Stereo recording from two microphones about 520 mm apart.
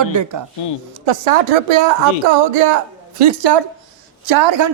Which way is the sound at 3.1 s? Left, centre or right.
Right.